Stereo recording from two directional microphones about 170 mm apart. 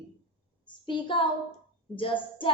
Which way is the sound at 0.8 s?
30° left (ahead or behind).